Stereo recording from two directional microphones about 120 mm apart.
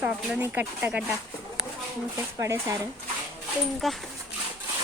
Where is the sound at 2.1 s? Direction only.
25° right (ahead or behind).